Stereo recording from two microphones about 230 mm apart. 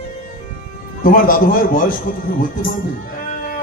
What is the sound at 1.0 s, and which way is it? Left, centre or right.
Speech, left.